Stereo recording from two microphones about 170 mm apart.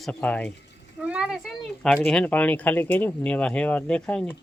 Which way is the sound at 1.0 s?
5° right (ahead or behind).